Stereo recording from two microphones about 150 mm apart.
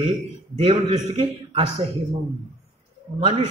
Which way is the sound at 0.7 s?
45° right (ahead or behind).